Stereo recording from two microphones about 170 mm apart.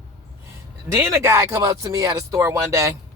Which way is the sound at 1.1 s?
15° right (ahead or behind).